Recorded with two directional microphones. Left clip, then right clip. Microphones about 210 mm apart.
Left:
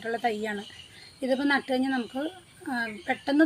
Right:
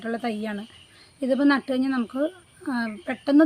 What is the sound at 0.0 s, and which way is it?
A woman's voice, 50° right (ahead or behind).